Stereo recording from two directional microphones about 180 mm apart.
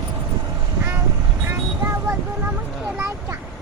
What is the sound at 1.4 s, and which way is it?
Vehicle, 15° right (ahead or behind).